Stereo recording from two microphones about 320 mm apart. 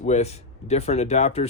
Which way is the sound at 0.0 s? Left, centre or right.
Centre.